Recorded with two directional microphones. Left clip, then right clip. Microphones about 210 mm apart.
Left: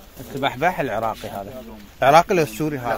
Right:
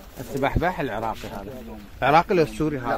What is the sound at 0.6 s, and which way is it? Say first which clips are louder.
Speech: left 4 dB; 40° left (ahead or behind).